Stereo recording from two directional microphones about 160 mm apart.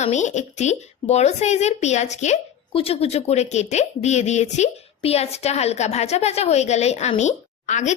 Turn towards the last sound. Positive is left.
turn(degrees=50)  # may be behind; listen again after turning